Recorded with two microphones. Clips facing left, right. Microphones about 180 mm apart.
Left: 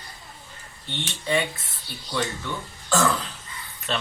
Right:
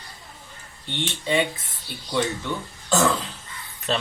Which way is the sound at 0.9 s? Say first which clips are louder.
Right 2 dB; 20° right (ahead or behind).